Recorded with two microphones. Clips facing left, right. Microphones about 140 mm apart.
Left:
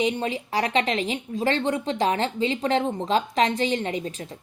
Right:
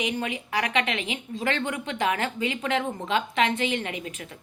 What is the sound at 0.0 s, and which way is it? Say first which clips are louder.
A woman's voice: left 4 dB; 30° left (ahead or behind).